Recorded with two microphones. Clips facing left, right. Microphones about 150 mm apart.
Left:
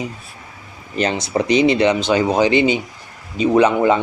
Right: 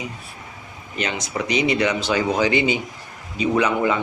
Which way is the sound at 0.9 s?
35° left (ahead or behind).